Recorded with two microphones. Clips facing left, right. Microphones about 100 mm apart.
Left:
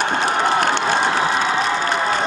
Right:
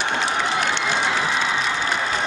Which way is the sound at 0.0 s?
45° left (ahead or behind).